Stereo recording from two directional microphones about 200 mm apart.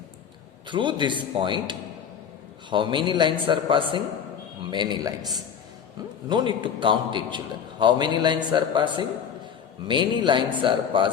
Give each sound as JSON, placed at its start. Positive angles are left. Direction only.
{"t": 0.7, "sound": "a man's voice", "side_deg": -25}
{"t": 6.2, "sound": "a man's voice", "side_deg": -20}